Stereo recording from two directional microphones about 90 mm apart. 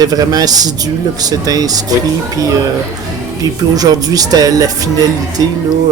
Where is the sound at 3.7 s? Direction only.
45° right (ahead or behind).